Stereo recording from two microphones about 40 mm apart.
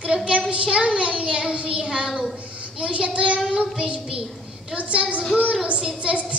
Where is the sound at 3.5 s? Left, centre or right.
Right.